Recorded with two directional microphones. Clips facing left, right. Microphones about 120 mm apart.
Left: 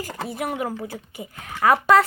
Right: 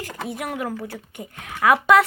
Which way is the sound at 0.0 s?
5° left (ahead or behind).